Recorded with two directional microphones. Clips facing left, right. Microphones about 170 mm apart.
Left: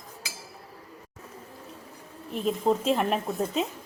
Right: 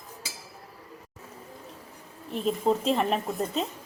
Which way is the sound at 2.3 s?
Centre (ahead or behind).